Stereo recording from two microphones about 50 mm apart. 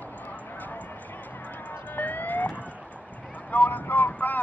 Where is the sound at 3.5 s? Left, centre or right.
Left.